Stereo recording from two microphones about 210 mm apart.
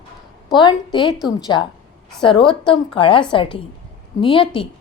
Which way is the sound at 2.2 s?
25° left (ahead or behind).